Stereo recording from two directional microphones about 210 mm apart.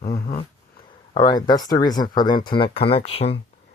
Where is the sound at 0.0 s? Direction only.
45° left (ahead or behind).